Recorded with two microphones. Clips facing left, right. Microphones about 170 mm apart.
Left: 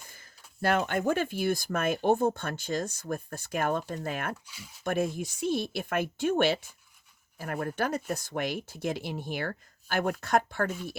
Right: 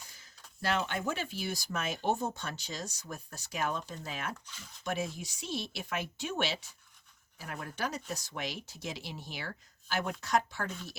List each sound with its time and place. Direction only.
0.0 s speech: 55° left (ahead or behind)
4.4 s speech: 10° left (ahead or behind)
4.8 s speech: 55° left (ahead or behind)